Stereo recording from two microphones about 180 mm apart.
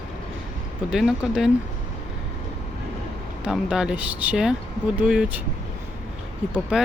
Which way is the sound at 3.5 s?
5° right (ahead or behind).